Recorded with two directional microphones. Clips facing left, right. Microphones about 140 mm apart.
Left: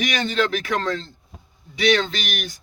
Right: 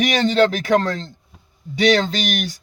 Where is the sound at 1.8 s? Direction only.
40° right (ahead or behind).